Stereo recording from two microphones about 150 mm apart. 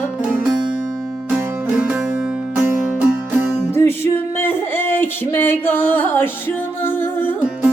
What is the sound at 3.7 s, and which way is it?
Music, 15° left (ahead or behind).